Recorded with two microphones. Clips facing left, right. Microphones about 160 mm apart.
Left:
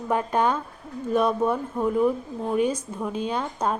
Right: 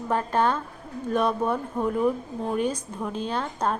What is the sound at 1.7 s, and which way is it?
A woman's voice, centre (ahead or behind).